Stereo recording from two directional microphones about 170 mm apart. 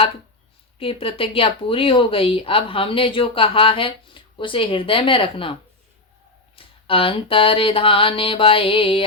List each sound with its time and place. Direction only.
0.8 s speech: 30° left (ahead or behind)
6.6 s speech: 30° left (ahead or behind)